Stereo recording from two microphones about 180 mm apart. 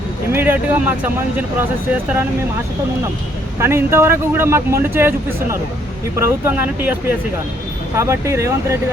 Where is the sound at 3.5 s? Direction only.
15° right (ahead or behind).